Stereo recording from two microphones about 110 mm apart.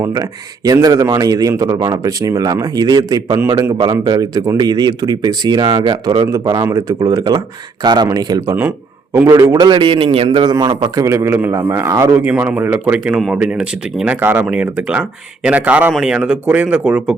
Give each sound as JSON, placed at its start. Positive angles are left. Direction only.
{"t": 0.0, "sound": "a man's voice", "side_deg": -30}
{"t": 8.4, "sound": "a man's voice", "side_deg": -20}
{"t": 9.2, "sound": "a man's voice", "side_deg": -30}
{"t": 10.2, "sound": "a man's voice", "side_deg": -40}
{"t": 12.2, "sound": "speech", "side_deg": -15}